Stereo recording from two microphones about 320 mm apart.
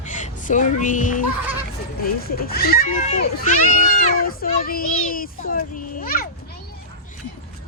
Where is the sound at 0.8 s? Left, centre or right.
Left.